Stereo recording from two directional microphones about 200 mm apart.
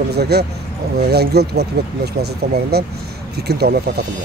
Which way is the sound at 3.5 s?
50° right (ahead or behind).